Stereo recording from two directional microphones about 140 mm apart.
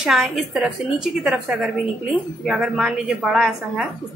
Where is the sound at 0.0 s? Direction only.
5° right (ahead or behind).